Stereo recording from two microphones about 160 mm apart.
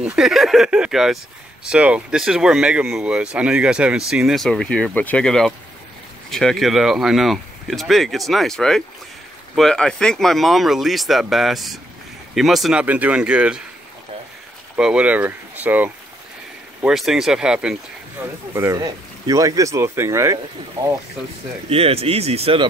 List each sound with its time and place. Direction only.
0.1 s speech: centre (ahead or behind)
14.8 s speech: 5° right (ahead or behind)
18.2 s speech: 15° right (ahead or behind)
21.6 s speech: 40° right (ahead or behind)